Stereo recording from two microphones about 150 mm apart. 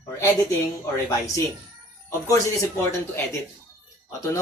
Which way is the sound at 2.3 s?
20° left (ahead or behind).